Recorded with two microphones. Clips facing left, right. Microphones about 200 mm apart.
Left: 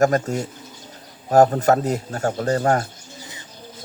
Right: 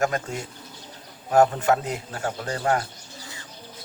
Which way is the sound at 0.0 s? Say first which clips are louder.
Left 7 dB; 40° left (ahead or behind).